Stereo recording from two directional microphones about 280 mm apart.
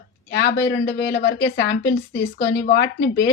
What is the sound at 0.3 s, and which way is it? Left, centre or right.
Speech, left.